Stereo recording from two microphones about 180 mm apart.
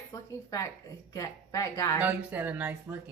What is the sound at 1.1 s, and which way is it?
Speech, 20° left (ahead or behind).